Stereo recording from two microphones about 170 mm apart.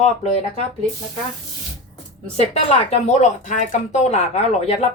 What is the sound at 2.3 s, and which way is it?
Speech, 35° left (ahead or behind).